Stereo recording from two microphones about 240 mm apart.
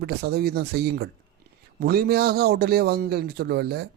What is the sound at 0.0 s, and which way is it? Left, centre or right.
A man's voice, right.